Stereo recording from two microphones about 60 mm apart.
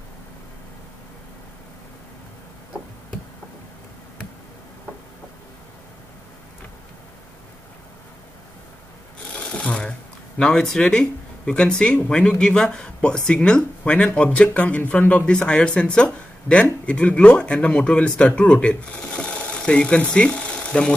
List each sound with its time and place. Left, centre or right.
9.6 s zipper: centre
10.8 s speech: centre